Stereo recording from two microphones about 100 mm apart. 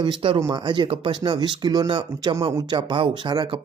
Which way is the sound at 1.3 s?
45° right (ahead or behind).